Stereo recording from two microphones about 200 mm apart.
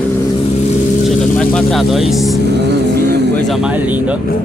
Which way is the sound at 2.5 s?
55° right (ahead or behind).